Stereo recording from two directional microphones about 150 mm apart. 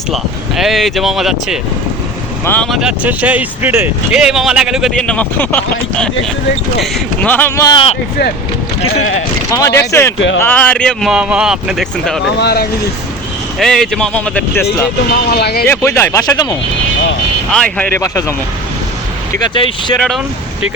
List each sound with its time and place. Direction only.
0.1 s speech: centre (ahead or behind)
2.4 s speech: 10° left (ahead or behind)
2.6 s speech: 5° right (ahead or behind); by 7.8 s 20° left (ahead or behind)
9.5 s speech: 20° left (ahead or behind); by 11.1 s 5° left (ahead or behind)
11.1 s speech: 5° right (ahead or behind)
12.4 s speech: 90° left
13.6 s speech: centre (ahead or behind)
15.1 s speech: 90° left
15.6 s speech: 15° left (ahead or behind)
17.5 s speech: 5° left (ahead or behind)
18.0 s speech: 20° left (ahead or behind)
19.4 s speech: 25° left (ahead or behind)
20.0 s speech: 5° left (ahead or behind)